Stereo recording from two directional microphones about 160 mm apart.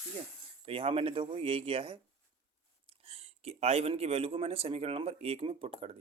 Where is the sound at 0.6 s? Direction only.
35° right (ahead or behind).